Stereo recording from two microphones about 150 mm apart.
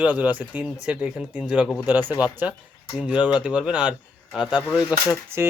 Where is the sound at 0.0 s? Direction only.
10° right (ahead or behind).